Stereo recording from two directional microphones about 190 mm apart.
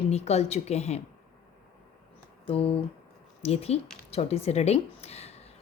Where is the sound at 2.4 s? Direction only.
30° left (ahead or behind).